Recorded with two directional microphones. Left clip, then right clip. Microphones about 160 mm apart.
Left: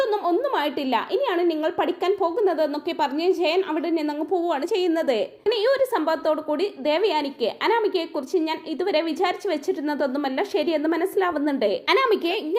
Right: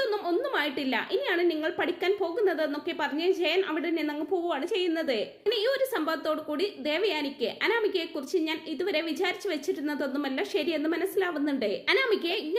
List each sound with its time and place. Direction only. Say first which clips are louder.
0.0 s a woman's voice: left 6 dB; 25° left (ahead or behind)
5.5 s speech: left 6 dB; 20° left (ahead or behind)